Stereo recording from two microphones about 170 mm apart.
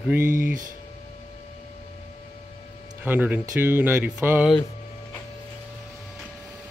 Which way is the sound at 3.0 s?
10° right (ahead or behind).